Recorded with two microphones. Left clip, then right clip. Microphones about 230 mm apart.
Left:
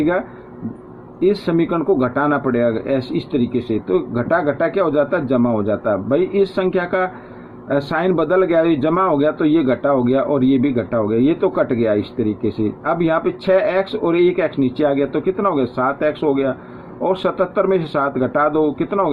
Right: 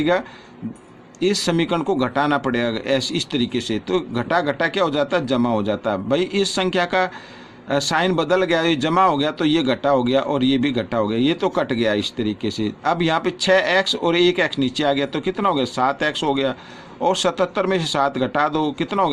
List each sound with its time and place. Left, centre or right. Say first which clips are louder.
1.2 s speech: left 3 dB; right